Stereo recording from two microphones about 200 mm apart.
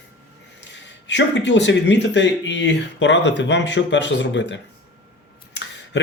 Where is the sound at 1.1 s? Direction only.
60° left (ahead or behind).